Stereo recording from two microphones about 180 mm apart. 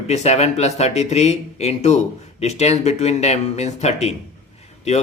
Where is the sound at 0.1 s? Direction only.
35° left (ahead or behind).